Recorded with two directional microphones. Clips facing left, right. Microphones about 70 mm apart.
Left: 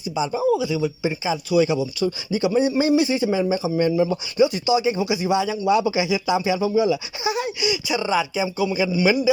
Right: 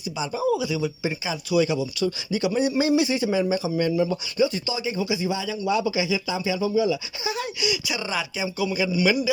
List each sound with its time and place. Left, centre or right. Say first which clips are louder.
0.2 s speech: left 4 dB; centre
3.8 s speech: left 5 dB; centre
7.6 s speech: left 4 dB; centre